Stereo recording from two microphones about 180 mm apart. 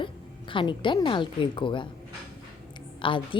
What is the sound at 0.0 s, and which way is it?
A woman's voice, 25° left (ahead or behind).